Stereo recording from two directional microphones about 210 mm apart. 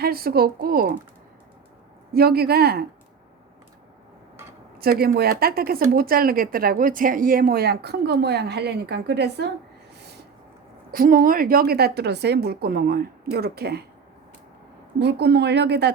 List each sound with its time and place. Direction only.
0.0 s speech: 45° right (ahead or behind)
2.1 s speech: 50° right (ahead or behind)
4.8 s speech: 45° right (ahead or behind)
10.9 s speech: 40° right (ahead or behind)
14.9 s speech: 55° right (ahead or behind)